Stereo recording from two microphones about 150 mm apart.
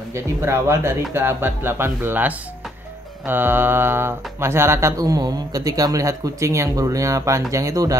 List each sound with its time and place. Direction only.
0.1 s speech: 15° right (ahead or behind)